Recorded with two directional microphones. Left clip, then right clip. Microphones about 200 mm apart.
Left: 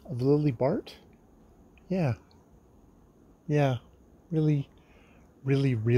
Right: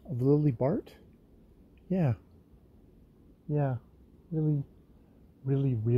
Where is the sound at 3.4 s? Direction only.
20° left (ahead or behind).